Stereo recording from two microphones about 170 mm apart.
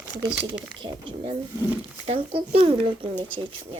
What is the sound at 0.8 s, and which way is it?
Speech, 30° right (ahead or behind).